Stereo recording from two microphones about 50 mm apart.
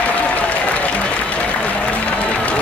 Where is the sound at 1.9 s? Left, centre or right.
Left.